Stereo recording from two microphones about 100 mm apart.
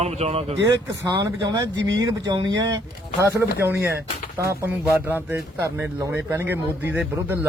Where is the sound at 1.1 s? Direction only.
45° right (ahead or behind).